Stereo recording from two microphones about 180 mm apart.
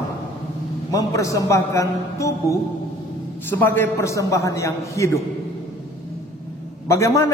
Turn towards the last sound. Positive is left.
turn(degrees=15)  # may be behind; listen again after turning